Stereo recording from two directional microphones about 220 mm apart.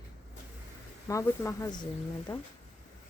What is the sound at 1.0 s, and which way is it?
A woman's voice, 15° left (ahead or behind).